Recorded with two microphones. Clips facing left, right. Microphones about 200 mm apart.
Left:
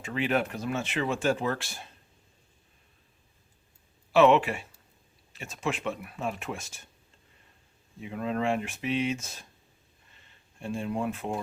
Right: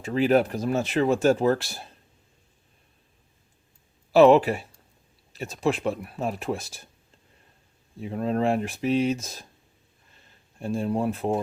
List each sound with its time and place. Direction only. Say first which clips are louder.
0.0 s speech: right 7 dB; 35° right (ahead or behind)
4.1 s speech: right 5 dB; 35° right (ahead or behind)
8.0 s speech: right 5 dB; 35° right (ahead or behind)
10.6 s speech: right 5 dB; 40° right (ahead or behind)